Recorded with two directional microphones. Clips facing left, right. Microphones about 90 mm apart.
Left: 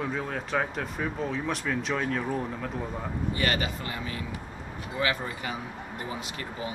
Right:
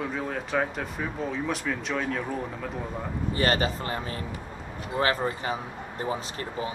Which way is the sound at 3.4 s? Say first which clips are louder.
Right 5 dB; 35° right (ahead or behind).